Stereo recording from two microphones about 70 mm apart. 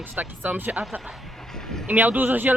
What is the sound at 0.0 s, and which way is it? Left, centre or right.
Speech, right.